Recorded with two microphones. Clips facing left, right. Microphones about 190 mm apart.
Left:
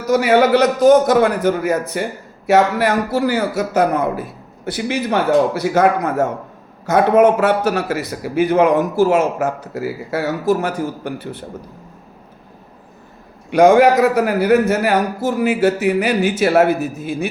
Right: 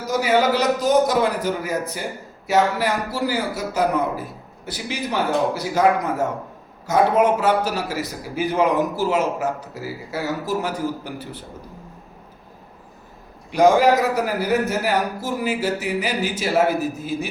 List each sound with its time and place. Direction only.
0.1 s a man's voice: 65° left (ahead or behind)
13.5 s a man's voice: 65° left (ahead or behind)